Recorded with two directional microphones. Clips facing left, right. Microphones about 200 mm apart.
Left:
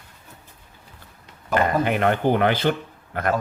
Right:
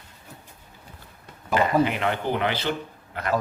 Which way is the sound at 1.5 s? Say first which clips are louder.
Left 1 dB; 50° left (ahead or behind).